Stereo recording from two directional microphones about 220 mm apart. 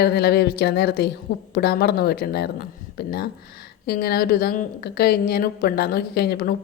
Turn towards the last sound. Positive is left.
turn(degrees=45)  # may be behind; listen again after turning